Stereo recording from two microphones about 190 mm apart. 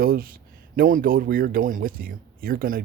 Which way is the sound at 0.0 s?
50° right (ahead or behind).